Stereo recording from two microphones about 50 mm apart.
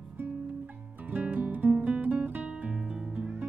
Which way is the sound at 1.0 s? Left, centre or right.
Right.